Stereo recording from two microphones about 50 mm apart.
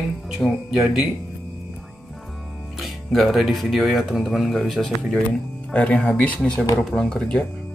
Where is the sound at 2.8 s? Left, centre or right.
Centre.